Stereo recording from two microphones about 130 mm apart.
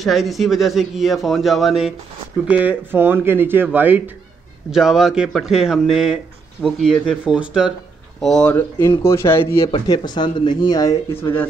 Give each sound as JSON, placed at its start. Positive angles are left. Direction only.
{"t": 0.0, "sound": "speech", "side_deg": 0}
{"t": 4.6, "sound": "speech", "side_deg": -5}
{"t": 8.2, "sound": "speech", "side_deg": 5}
{"t": 8.5, "sound": "speech", "side_deg": 20}
{"t": 9.6, "sound": "speech", "side_deg": 45}
{"t": 9.8, "sound": "speech", "side_deg": 35}